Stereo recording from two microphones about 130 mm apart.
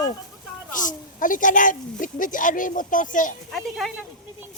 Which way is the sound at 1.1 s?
90° left.